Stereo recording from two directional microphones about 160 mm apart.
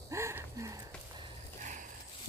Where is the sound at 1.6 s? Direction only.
50° right (ahead or behind).